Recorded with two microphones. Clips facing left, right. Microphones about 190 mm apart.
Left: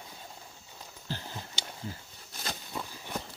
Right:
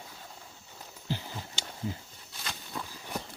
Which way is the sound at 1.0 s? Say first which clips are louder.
Right 3 dB; 15° right (ahead or behind).